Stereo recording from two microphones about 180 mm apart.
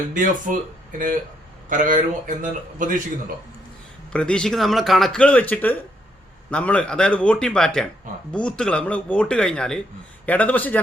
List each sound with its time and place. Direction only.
0.1 s a man's voice: 45° right (ahead or behind)
1.7 s a man's voice: 45° right (ahead or behind)
4.1 s a man's voice: 5° left (ahead or behind)